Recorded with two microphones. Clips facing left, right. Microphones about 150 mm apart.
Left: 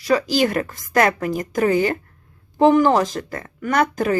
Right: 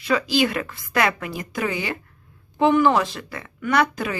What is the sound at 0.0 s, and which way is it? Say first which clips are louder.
Speech: left 3 dB; 40° left (ahead or behind).